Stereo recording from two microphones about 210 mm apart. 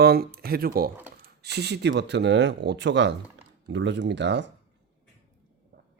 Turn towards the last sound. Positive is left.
turn(degrees=-55)  # may be behind; listen again after turning